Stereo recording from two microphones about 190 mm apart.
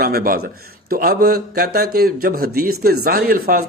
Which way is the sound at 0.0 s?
55° right (ahead or behind).